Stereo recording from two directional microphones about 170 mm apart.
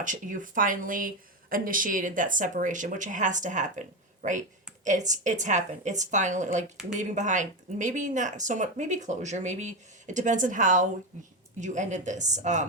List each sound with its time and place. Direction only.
0.0 s speech: 50° right (ahead or behind)